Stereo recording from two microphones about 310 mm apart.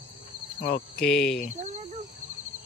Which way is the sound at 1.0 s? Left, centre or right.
Centre.